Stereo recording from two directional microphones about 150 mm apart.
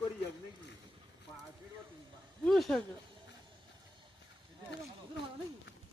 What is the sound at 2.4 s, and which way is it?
Speech, centre (ahead or behind).